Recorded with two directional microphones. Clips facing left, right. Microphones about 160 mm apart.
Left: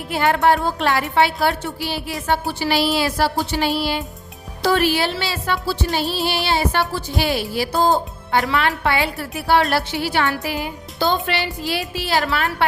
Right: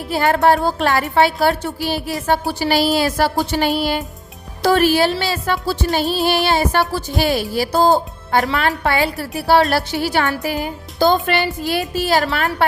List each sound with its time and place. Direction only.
0.1 s speech: 40° right (ahead or behind)